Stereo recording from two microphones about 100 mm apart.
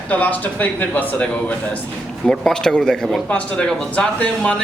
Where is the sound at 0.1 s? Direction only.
15° left (ahead or behind).